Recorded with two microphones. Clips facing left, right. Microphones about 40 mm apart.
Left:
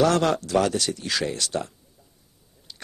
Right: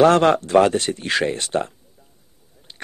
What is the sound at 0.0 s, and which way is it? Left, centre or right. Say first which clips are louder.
Speech: right 6 dB; right.